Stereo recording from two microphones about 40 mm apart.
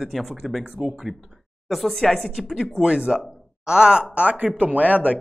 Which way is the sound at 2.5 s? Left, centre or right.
Centre.